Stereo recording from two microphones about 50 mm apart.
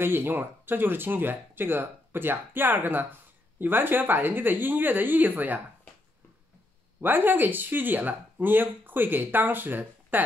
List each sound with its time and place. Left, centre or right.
0.0 s speech: right
7.0 s speech: right